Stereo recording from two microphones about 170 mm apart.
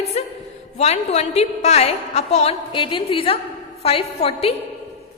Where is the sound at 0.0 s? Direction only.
40° left (ahead or behind).